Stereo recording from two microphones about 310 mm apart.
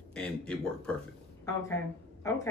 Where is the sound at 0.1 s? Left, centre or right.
Centre.